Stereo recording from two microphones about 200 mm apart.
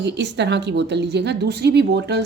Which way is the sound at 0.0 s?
60° right (ahead or behind).